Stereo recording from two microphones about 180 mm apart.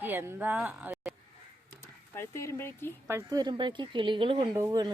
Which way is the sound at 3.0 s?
15° right (ahead or behind).